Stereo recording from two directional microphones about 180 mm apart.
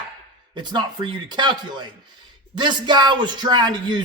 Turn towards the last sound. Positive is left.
turn(degrees=-25)  # may be behind; listen again after turning